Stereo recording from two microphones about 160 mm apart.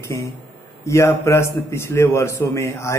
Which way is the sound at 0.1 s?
15° left (ahead or behind).